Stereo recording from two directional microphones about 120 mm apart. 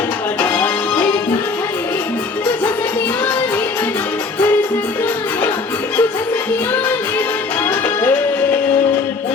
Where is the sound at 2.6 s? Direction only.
15° left (ahead or behind).